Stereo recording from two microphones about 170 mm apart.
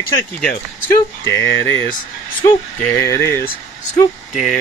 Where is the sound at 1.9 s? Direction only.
25° left (ahead or behind).